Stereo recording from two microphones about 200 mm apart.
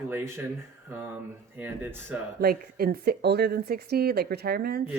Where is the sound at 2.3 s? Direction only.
50° right (ahead or behind).